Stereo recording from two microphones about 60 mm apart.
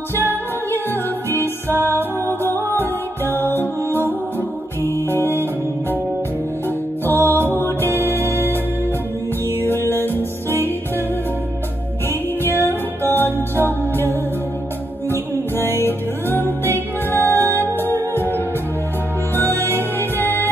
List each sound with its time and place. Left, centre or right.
0.1 s music: right
1.8 s music: left
7.1 s music: left
9.7 s music: left
12.5 s music: left